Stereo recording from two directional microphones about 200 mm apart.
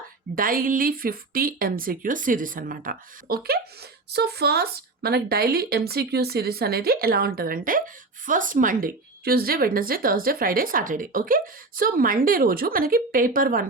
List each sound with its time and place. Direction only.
0.3 s a woman's voice: 45° right (ahead or behind)